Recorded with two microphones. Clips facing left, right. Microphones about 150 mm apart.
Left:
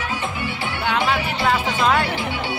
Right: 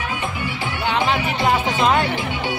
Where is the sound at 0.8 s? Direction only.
15° right (ahead or behind).